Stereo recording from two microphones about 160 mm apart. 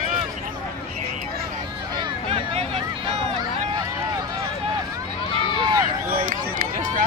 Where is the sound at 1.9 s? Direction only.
30° right (ahead or behind).